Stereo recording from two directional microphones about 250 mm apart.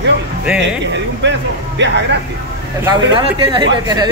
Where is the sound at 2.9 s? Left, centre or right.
Centre.